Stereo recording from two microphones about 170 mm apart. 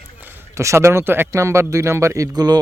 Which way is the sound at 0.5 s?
15° right (ahead or behind).